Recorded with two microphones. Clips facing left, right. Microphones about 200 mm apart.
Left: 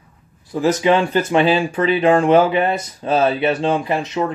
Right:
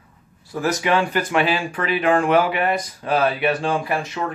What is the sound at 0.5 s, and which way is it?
Speech, 20° left (ahead or behind).